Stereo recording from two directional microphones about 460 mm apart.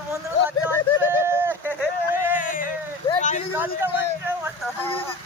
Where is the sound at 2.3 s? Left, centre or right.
Centre.